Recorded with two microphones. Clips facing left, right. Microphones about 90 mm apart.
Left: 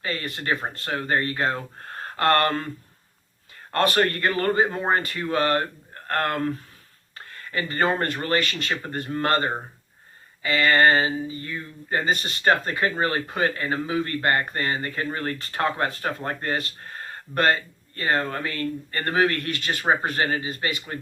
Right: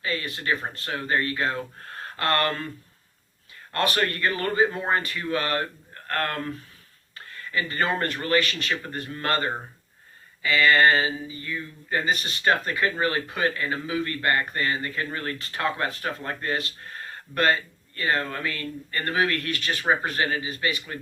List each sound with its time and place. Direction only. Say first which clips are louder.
0.0 s speech: even; 40° left (ahead or behind)
3.7 s speech: left 4 dB; 40° left (ahead or behind)